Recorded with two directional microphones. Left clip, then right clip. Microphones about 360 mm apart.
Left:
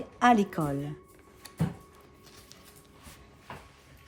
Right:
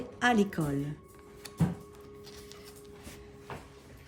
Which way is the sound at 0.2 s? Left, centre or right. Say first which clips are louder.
Left 4 dB; centre.